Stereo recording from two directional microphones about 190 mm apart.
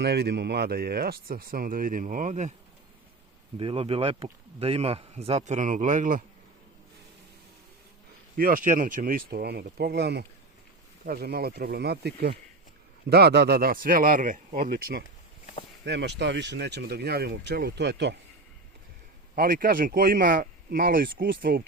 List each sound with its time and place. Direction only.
0.0 s speech: 60° right (ahead or behind); by 2.5 s 40° right (ahead or behind)
3.6 s speech: 30° right (ahead or behind); by 6.2 s 45° right (ahead or behind)
8.4 s speech: 45° right (ahead or behind)
15.8 s speech: 65° right (ahead or behind)
19.4 s speech: 50° right (ahead or behind)